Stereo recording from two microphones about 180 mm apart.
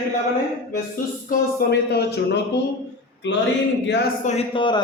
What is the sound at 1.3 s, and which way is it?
Speech, 60° left (ahead or behind).